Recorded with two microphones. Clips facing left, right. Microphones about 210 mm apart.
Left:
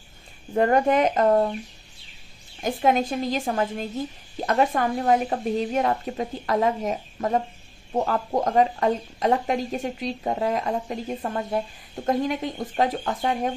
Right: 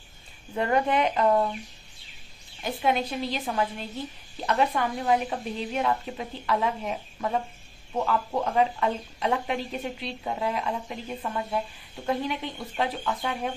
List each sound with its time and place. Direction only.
0.6 s a woman's voice: 45° left (ahead or behind)
2.6 s a woman's voice: 45° left (ahead or behind)